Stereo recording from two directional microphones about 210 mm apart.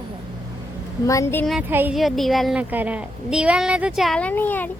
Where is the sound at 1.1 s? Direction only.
15° left (ahead or behind).